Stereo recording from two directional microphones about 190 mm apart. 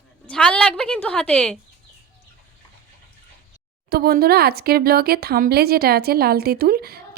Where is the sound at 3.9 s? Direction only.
55° right (ahead or behind).